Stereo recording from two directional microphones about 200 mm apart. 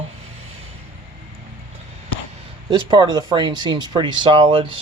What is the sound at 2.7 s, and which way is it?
Speech, 20° right (ahead or behind).